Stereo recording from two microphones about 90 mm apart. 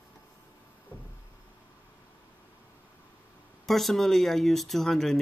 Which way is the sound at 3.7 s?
Centre (ahead or behind).